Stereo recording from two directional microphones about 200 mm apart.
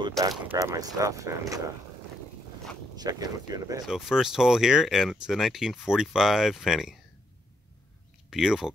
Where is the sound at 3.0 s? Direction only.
20° right (ahead or behind).